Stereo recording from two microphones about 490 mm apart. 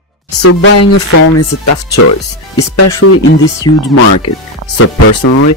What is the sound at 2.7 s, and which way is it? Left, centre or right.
Speech, left.